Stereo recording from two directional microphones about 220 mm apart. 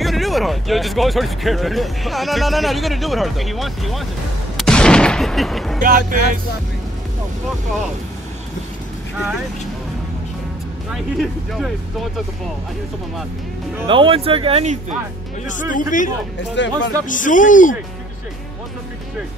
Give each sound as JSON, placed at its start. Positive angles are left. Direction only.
{"t": 0.0, "sound": "speech", "side_deg": 0}
{"t": 4.6, "sound": "gunshot", "side_deg": 5}
{"t": 5.8, "sound": "speech", "side_deg": -40}
{"t": 10.9, "sound": "speech", "side_deg": 0}
{"t": 13.8, "sound": "speech", "side_deg": -25}
{"t": 15.4, "sound": "a man's voice", "side_deg": 35}
{"t": 16.5, "sound": "speech", "side_deg": 55}
{"t": 17.0, "sound": "a man's voice", "side_deg": 35}